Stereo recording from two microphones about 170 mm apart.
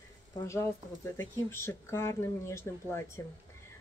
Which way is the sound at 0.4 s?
15° left (ahead or behind).